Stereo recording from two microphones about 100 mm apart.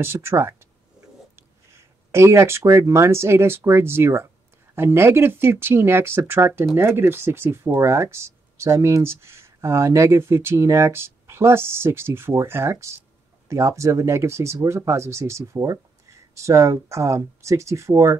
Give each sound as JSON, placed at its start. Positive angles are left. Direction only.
{"t": 0.0, "sound": "speech", "side_deg": -25}
{"t": 2.1, "sound": "speech", "side_deg": -25}